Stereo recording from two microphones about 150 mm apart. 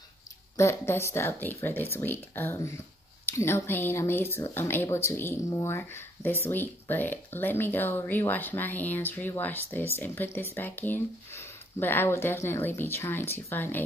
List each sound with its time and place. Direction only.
0.6 s speech: 15° left (ahead or behind)